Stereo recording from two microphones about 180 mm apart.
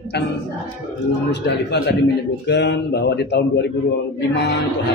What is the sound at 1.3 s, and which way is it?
A man's voice, 70° left (ahead or behind).